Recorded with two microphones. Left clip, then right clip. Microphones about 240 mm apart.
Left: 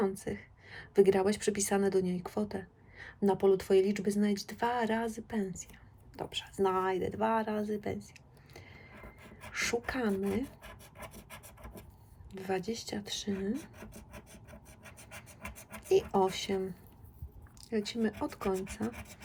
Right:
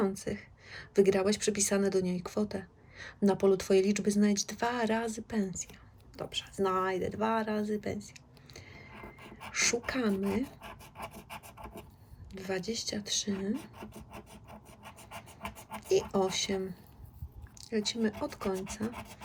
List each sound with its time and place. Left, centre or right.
0.0 s a woman's voice: centre
8.5 s a sound: centre
9.5 s a woman's voice: centre
12.3 s a woman's voice: centre
15.9 s a woman's voice: centre